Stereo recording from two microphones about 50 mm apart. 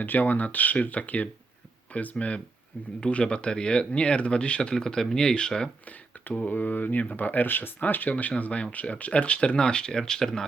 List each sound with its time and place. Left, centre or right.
0.0 s speech: left; by 5.7 s centre
6.4 s speech: left; by 10.4 s centre